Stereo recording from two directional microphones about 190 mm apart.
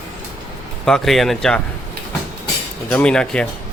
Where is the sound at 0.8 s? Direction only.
Centre (ahead or behind).